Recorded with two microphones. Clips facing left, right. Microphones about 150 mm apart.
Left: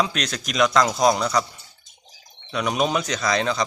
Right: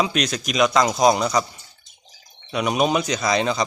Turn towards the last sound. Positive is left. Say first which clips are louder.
# right 2 dB
turn(degrees=-10)  # may be behind; listen again after turning